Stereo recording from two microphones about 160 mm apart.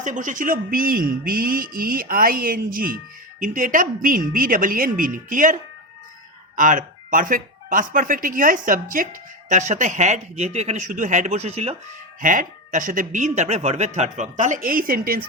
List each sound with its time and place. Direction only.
0.0 s speech: 55° right (ahead or behind)
6.6 s speech: 55° right (ahead or behind)
12.2 s speech: 55° right (ahead or behind)